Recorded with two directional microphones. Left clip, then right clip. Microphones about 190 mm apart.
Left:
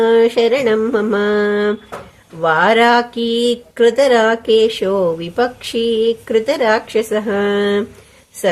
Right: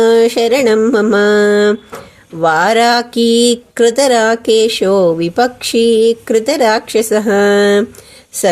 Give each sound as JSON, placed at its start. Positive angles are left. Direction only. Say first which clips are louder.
{"t": 0.0, "sound": "speech", "louder": "right 2 dB", "side_deg": -30}